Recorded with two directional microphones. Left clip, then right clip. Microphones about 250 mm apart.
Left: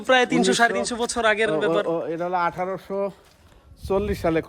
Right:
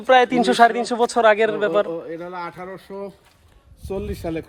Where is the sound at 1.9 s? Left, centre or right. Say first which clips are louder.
Left 5 dB; left.